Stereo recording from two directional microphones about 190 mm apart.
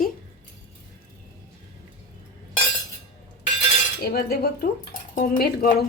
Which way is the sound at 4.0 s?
55° left (ahead or behind).